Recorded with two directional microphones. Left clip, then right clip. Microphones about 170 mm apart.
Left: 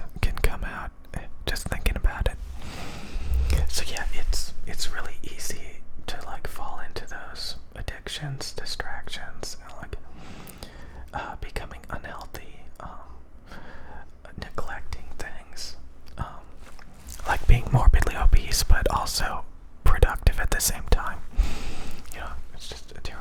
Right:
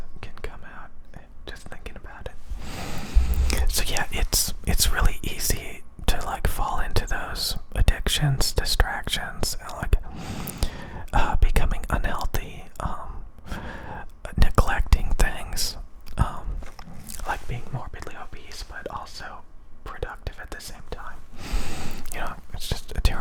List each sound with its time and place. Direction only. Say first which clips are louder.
0.2 s whispering: left 9 dB; 25° left (ahead or behind)
2.6 s whispering: right 4 dB; 20° right (ahead or behind)
3.9 s whispering: right 7 dB; 30° right (ahead or behind)
15.7 s whispering: right 7 dB; 25° right (ahead or behind)
17.5 s whispering: left 10 dB; 25° left (ahead or behind)
21.5 s whispering: right 7 dB; 20° right (ahead or behind)